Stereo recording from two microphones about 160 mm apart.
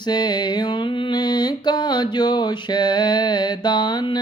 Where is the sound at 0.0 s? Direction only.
25° left (ahead or behind).